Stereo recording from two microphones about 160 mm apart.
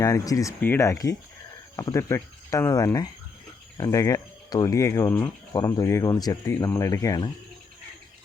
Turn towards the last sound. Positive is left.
turn(degrees=20)  # may be behind; listen again after turning